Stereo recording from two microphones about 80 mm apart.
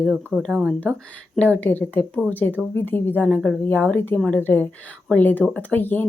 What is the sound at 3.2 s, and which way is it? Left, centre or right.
Speech, centre.